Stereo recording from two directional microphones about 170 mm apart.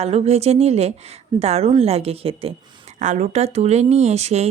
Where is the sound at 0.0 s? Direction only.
40° right (ahead or behind).